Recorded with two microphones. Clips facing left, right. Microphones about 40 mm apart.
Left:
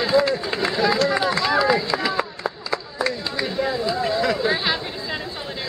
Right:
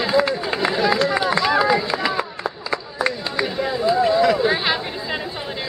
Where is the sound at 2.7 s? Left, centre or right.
Centre.